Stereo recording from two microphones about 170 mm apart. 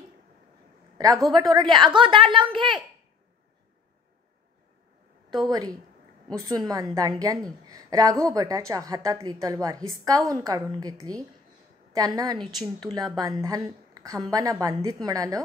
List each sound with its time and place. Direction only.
0.9 s a woman's voice: 20° right (ahead or behind)
5.5 s a woman's voice: 20° right (ahead or behind)